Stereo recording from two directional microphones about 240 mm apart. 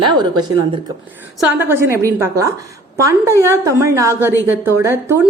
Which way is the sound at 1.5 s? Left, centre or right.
Centre.